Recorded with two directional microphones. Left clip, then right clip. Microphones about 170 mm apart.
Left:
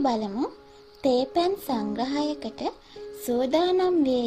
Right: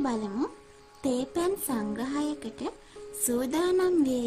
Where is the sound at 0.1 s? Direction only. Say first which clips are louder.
Left 4 dB; centre (ahead or behind).